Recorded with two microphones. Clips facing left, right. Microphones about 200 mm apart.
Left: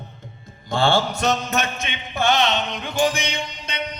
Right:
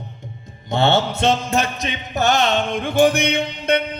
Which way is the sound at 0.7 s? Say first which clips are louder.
Right 2 dB; 20° right (ahead or behind).